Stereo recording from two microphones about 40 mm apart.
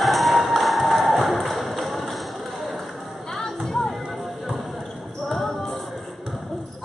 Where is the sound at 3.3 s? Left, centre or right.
Centre.